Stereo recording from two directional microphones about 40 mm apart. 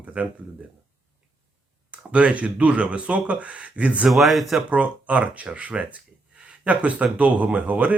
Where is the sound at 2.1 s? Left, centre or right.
Right.